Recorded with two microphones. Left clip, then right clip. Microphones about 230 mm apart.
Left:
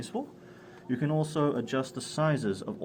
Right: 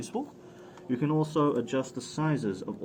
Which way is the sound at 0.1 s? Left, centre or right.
Left.